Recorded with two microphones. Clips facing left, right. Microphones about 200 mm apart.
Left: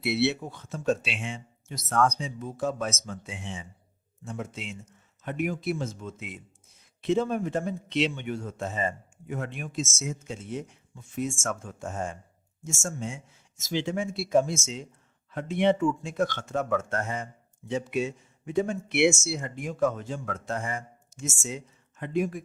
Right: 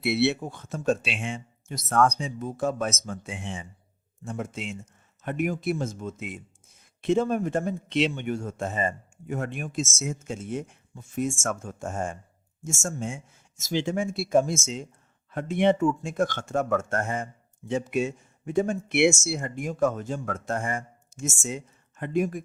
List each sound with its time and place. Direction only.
0.0 s a man's voice: 55° right (ahead or behind)